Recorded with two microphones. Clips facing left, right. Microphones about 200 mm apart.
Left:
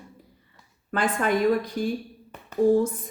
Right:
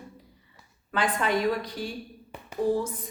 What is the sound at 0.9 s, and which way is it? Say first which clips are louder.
A woman's voice: left 3 dB; 50° left (ahead or behind).